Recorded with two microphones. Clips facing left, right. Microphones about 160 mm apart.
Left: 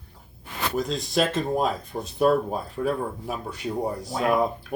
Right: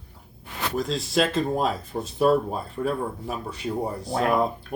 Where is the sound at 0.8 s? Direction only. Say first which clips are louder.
Right 1 dB; centre (ahead or behind).